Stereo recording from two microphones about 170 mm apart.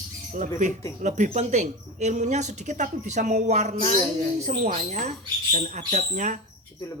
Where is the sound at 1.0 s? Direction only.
45° right (ahead or behind).